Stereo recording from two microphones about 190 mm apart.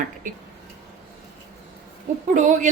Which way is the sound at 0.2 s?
45° right (ahead or behind).